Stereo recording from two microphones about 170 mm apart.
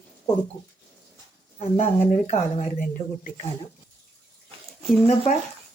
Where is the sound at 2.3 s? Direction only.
50° left (ahead or behind).